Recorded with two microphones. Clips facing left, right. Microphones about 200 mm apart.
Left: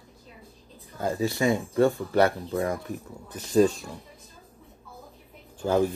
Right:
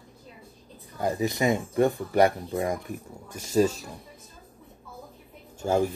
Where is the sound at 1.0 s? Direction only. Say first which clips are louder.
Even; 20° right (ahead or behind).